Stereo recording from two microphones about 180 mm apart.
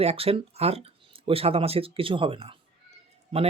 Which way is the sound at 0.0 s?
35° right (ahead or behind).